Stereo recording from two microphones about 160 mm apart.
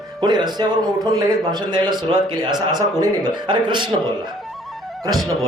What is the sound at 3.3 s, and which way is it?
Speech, 30° right (ahead or behind).